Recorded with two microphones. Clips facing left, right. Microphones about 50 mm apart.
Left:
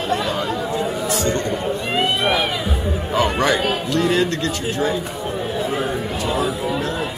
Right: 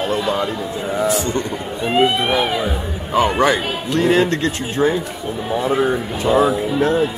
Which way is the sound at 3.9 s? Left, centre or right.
Right.